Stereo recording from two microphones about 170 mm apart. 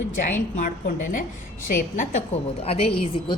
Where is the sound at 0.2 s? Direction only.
50° left (ahead or behind).